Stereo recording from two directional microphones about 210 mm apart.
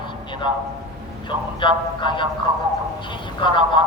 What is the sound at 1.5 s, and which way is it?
Speech, 20° left (ahead or behind).